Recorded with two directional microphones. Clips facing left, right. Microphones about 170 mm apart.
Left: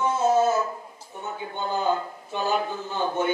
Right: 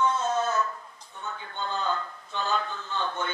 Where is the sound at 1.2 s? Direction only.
20° left (ahead or behind).